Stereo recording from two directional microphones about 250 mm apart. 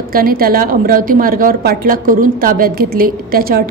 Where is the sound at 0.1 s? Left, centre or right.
Right.